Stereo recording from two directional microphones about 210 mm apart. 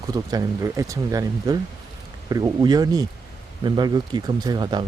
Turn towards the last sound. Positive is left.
turn(degrees=-20)  # may be behind; listen again after turning